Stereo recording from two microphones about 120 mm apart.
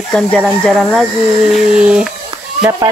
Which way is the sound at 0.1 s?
5° left (ahead or behind).